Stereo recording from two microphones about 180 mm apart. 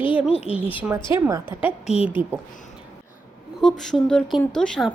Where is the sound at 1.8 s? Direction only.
35° left (ahead or behind).